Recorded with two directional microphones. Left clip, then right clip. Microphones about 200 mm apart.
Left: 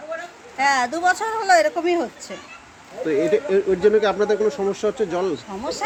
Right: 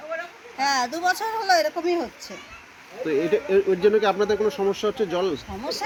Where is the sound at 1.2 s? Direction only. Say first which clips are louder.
Left 4 dB; 5° left (ahead or behind).